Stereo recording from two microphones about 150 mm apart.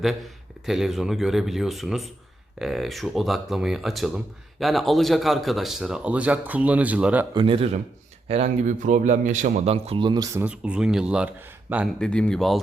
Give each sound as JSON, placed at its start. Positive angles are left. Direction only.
{"t": 0.6, "sound": "speech", "side_deg": 0}
{"t": 7.3, "sound": "speech", "side_deg": -35}
{"t": 8.3, "sound": "a man's voice", "side_deg": -50}
{"t": 10.3, "sound": "speech", "side_deg": -10}
{"t": 11.9, "sound": "speech", "side_deg": 5}